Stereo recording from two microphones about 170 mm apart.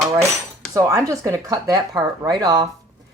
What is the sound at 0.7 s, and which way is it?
Speech, 20° right (ahead or behind).